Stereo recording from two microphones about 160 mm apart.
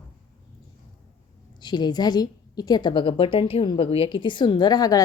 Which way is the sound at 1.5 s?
25° left (ahead or behind).